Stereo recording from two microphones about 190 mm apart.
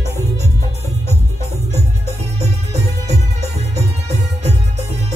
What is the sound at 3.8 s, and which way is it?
Music, 35° right (ahead or behind).